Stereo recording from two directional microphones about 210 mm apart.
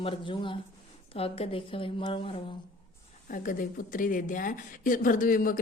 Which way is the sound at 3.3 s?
40° left (ahead or behind).